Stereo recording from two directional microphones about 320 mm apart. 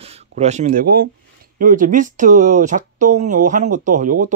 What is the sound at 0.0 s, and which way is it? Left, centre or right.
Speech, right.